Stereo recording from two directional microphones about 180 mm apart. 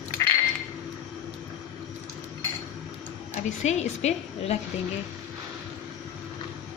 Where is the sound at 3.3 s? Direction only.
40° left (ahead or behind).